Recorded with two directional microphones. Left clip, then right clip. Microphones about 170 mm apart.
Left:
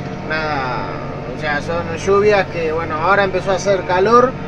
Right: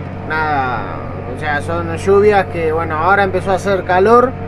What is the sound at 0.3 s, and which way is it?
Vehicle, 20° right (ahead or behind).